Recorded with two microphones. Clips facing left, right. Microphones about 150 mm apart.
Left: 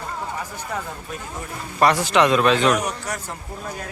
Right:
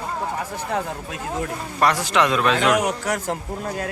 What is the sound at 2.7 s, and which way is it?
Speech, 90° right.